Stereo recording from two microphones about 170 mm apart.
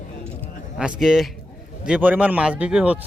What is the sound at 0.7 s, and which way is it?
A man's voice, 5° right (ahead or behind).